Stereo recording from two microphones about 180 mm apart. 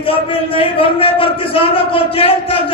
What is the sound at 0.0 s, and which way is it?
A man's voice, 30° left (ahead or behind).